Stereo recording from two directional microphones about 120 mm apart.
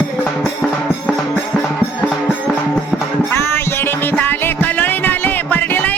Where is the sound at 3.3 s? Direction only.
20° left (ahead or behind).